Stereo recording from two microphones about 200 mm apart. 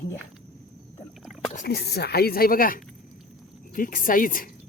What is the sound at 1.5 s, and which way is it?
Speech, 50° left (ahead or behind).